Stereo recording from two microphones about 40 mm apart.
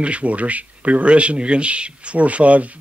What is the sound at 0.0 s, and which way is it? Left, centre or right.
Speech, right.